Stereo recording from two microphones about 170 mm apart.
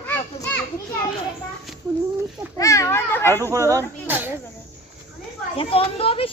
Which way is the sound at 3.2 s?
15° right (ahead or behind).